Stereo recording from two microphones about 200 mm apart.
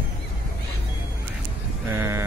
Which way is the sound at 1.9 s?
10° right (ahead or behind).